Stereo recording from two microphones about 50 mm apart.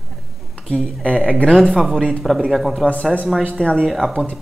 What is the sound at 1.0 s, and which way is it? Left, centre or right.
Speech, right.